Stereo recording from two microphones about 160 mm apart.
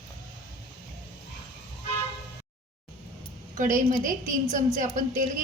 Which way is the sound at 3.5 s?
55° right (ahead or behind).